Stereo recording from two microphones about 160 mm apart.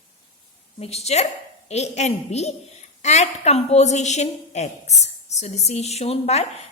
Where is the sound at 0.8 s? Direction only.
40° left (ahead or behind).